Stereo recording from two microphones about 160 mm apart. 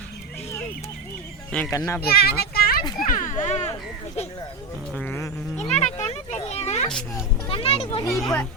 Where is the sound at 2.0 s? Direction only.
75° left (ahead or behind).